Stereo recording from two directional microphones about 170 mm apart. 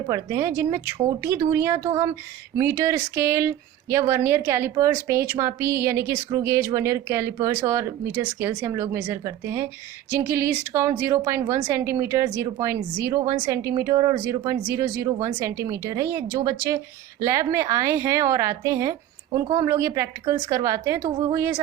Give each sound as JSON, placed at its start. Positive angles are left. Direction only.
{"t": 0.1, "sound": "a woman's voice", "side_deg": -15}